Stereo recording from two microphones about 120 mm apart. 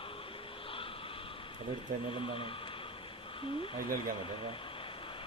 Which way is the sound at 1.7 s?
45° left (ahead or behind).